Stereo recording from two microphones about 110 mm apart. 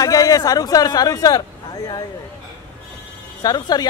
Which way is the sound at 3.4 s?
35° left (ahead or behind).